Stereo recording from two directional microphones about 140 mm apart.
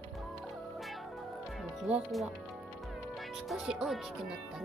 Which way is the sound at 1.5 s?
5° right (ahead or behind).